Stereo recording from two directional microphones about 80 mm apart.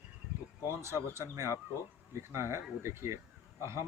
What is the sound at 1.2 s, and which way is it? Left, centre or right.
Speech, right.